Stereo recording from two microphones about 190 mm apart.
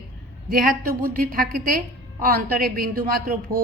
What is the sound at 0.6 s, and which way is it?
Speech, 50° right (ahead or behind).